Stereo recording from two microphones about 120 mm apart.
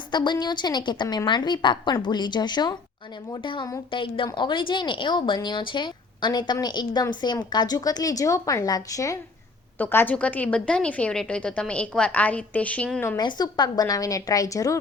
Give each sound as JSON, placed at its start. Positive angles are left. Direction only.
{"t": 0.1, "sound": "a woman's voice", "side_deg": 35}
{"t": 9.7, "sound": "a woman's voice", "side_deg": 15}
{"t": 13.1, "sound": "a woman's voice", "side_deg": 35}